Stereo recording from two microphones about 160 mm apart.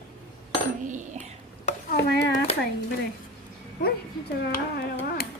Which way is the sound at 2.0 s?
90° left.